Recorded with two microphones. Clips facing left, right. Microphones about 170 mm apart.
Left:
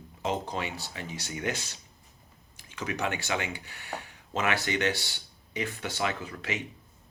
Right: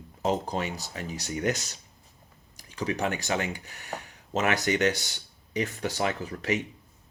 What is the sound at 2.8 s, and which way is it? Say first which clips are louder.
Speech: right 3 dB; 35° right (ahead or behind).